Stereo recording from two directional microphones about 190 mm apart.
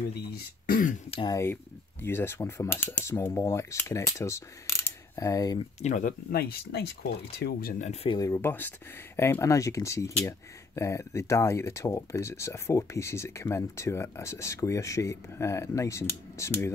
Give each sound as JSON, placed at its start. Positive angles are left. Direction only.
{"t": 0.7, "sound": "throat clearing", "side_deg": 45}
{"t": 1.1, "sound": "speech", "side_deg": 20}
{"t": 5.8, "sound": "speech", "side_deg": 40}
{"t": 7.8, "sound": "speech", "side_deg": 35}
{"t": 8.2, "sound": "speech", "side_deg": 15}